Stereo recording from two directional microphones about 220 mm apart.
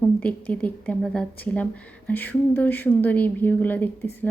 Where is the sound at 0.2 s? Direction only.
5° left (ahead or behind).